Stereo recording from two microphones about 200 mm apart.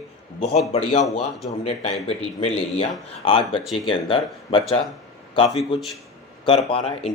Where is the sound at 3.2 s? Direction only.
25° left (ahead or behind).